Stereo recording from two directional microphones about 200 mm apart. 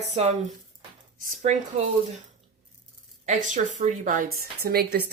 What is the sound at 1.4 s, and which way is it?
Speech, 35° right (ahead or behind).